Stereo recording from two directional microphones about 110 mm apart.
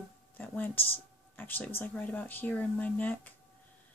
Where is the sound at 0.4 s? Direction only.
15° left (ahead or behind).